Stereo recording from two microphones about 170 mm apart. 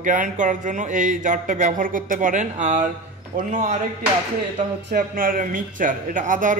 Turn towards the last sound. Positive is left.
turn(degrees=-50)  # may be behind; listen again after turning